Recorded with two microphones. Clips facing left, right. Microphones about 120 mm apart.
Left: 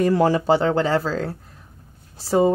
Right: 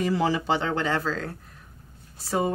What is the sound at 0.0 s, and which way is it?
A woman's voice, 50° left (ahead or behind).